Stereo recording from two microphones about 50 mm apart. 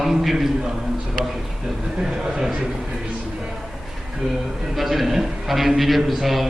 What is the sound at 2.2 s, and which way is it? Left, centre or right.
Speech, centre.